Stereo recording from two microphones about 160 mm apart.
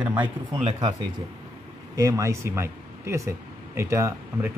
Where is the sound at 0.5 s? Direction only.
35° right (ahead or behind).